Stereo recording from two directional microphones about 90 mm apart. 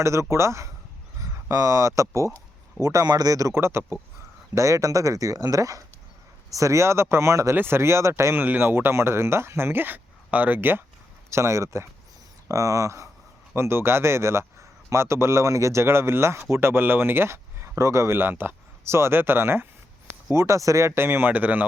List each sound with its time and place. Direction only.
0.0 s speech: 30° right (ahead or behind)
1.2 s a sound: 35° right (ahead or behind)
2.0 s speech: 35° right (ahead or behind); by 21.6 s 20° right (ahead or behind)